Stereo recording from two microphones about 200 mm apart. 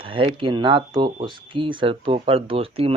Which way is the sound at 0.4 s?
25° right (ahead or behind).